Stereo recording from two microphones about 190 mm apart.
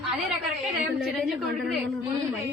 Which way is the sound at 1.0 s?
Centre (ahead or behind).